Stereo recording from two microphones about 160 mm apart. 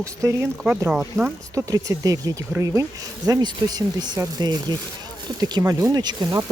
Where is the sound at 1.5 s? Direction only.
20° right (ahead or behind).